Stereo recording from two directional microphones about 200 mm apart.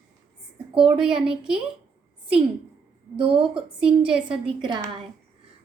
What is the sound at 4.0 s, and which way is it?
Speech, 5° right (ahead or behind).